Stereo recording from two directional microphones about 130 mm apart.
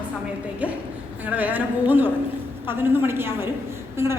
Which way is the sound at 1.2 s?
10° right (ahead or behind).